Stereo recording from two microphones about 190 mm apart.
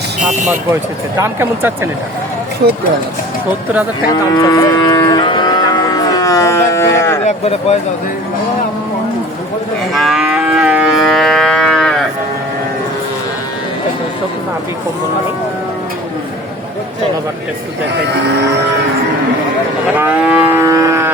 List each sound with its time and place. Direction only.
1.2 s speech: 15° right (ahead or behind)
4.1 s cattle: 20° left (ahead or behind)
7.3 s speech: 35° left (ahead or behind)
9.9 s moo: centre (ahead or behind)
20.0 s livestock: 10° right (ahead or behind)